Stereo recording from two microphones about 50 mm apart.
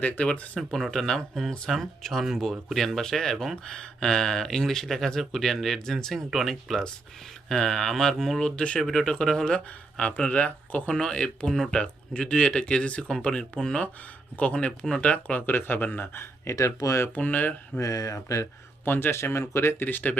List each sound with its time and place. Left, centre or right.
0.3 s speech: centre
8.4 s speech: centre
10.0 s speech: left
10.8 s speech: centre
15.4 s speech: left
16.5 s speech: left
17.2 s speech: left
17.7 s speech: centre
18.9 s speech: left
19.8 s speech: left